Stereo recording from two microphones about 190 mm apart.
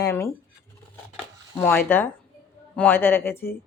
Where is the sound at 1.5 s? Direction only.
10° left (ahead or behind).